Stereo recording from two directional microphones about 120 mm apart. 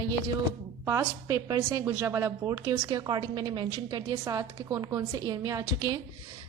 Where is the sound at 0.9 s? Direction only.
25° right (ahead or behind).